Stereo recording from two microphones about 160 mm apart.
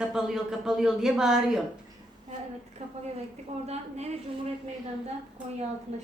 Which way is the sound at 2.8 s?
45° right (ahead or behind).